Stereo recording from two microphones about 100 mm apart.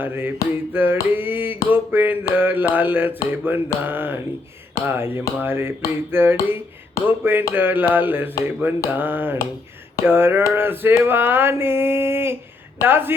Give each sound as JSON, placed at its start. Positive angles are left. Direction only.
{"t": 0.0, "sound": "mantra", "side_deg": -20}